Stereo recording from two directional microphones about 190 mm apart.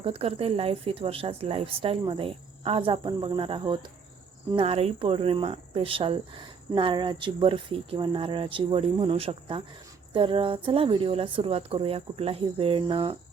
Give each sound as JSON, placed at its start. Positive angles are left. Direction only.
{"t": 0.0, "sound": "speech", "side_deg": -30}